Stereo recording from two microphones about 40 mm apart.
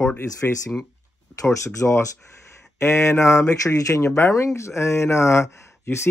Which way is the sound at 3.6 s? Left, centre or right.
Left.